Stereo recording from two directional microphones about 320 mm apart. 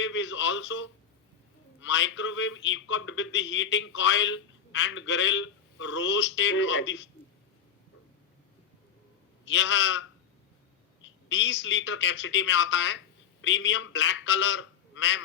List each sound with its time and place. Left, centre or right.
0.0 s a man's voice: left
9.5 s a man's voice: left
11.0 s a man's voice: left